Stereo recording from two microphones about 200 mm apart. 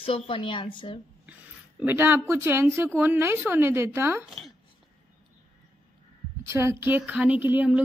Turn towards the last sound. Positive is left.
turn(degrees=-10)  # may be behind; listen again after turning